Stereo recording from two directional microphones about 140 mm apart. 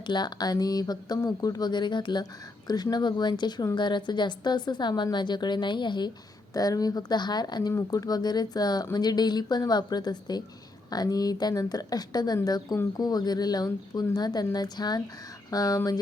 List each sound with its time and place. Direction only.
0.0 s a woman's voice: 30° left (ahead or behind)